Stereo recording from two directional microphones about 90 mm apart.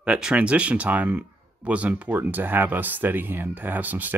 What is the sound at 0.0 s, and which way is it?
Speech, 10° right (ahead or behind).